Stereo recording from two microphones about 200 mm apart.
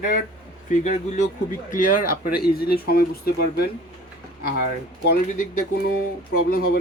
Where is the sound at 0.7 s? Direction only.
35° left (ahead or behind).